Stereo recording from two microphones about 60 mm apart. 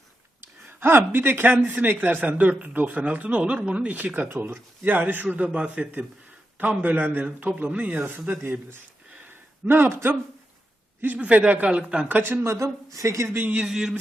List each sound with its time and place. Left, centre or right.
0.8 s speech: right
4.3 s speech: right
9.2 s a sound: right
11.0 s speech: right
12.0 s speech: right
12.5 s speech: right
13.7 s speech: centre